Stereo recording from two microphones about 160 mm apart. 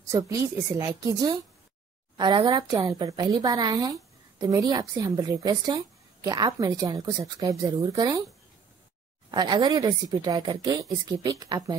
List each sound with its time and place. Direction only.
0.1 s a woman's voice: 20° right (ahead or behind)
9.3 s a woman's voice: 25° right (ahead or behind)